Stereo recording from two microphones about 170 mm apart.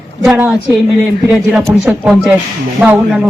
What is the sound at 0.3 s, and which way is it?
A man's voice, 10° right (ahead or behind).